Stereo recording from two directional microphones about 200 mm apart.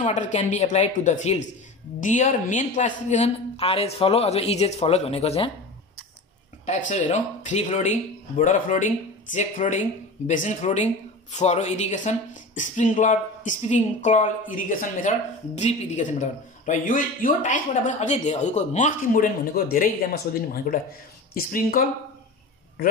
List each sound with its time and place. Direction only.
0.0 s speech: 35° left (ahead or behind)
6.6 s speech: 35° left (ahead or behind)